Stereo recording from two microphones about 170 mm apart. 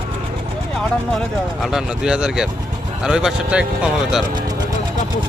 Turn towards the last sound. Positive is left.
turn(degrees=-5)  # may be behind; listen again after turning